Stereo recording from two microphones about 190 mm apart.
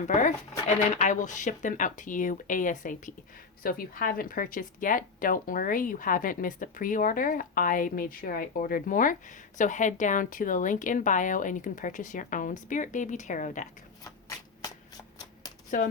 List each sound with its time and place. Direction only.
0.0 s a woman's voice: 40° left (ahead or behind)
14.0 s shuffling cards: 20° left (ahead or behind)